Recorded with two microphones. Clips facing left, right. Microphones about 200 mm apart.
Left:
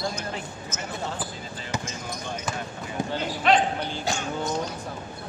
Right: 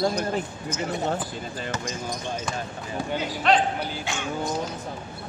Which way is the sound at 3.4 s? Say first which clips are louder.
Even; centre (ahead or behind).